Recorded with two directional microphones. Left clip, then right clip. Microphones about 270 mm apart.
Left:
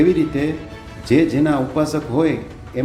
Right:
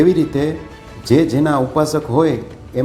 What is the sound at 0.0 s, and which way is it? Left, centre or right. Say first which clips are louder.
Speech: right 2 dB; centre.